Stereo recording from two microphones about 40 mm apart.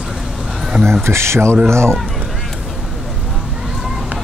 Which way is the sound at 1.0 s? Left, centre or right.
Right.